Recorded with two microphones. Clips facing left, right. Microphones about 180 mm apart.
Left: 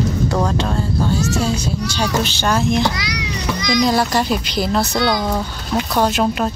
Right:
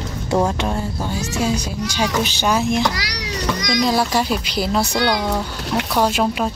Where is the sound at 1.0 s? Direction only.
15° right (ahead or behind).